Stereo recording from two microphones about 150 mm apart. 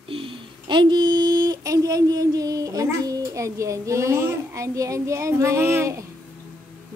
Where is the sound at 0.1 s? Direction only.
35° right (ahead or behind).